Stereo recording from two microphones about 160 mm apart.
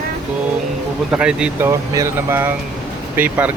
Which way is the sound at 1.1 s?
5° right (ahead or behind).